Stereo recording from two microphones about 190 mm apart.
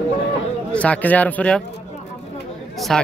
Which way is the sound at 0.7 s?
5° left (ahead or behind).